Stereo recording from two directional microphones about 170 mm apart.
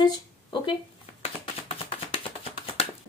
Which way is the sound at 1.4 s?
30° left (ahead or behind).